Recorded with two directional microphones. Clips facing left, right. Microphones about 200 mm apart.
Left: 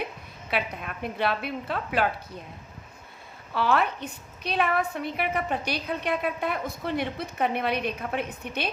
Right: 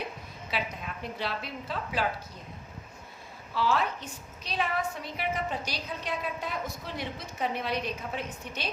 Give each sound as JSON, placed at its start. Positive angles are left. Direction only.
{"t": 0.5, "sound": "a woman's voice", "side_deg": 60}
{"t": 3.5, "sound": "a woman's voice", "side_deg": 60}